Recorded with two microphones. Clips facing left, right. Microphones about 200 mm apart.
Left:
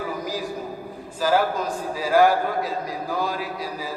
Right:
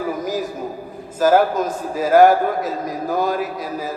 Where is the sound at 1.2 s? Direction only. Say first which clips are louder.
Right 6 dB; 45° right (ahead or behind).